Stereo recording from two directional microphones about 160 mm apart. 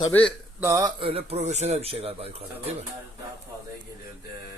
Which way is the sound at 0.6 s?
20° right (ahead or behind).